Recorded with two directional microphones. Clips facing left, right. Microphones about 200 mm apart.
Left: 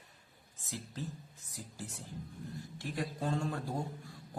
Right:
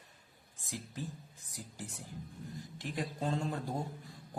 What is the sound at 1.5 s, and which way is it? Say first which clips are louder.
A man's voice: even; 15° right (ahead or behind).